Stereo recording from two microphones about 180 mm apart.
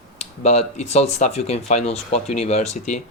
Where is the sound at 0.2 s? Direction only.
35° left (ahead or behind).